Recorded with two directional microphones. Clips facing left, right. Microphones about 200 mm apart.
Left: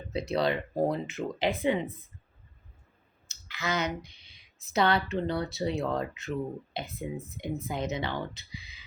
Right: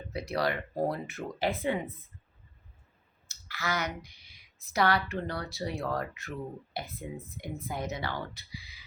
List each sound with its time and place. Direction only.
0.1 s speech: 25° left (ahead or behind)
3.2 s speech: 20° left (ahead or behind)